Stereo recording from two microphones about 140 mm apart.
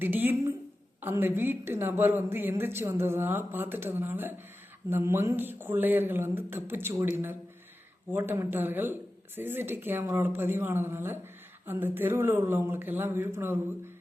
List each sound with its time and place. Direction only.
0.0 s speech: 15° right (ahead or behind)